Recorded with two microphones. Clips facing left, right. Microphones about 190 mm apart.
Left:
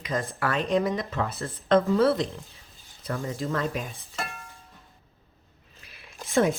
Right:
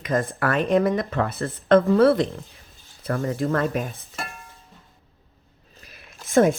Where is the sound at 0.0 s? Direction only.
55° right (ahead or behind).